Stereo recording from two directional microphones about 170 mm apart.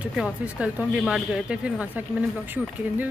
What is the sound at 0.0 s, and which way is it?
Speech, 5° right (ahead or behind).